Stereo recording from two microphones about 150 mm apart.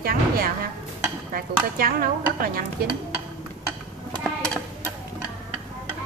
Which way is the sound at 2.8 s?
90° right.